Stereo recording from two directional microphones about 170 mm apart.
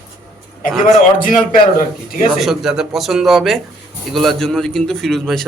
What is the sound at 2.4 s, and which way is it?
A man's voice, centre (ahead or behind).